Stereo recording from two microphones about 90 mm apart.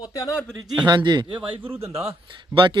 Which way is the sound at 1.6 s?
25° right (ahead or behind).